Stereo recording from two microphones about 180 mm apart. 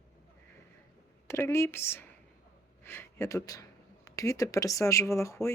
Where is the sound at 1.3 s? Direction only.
15° left (ahead or behind).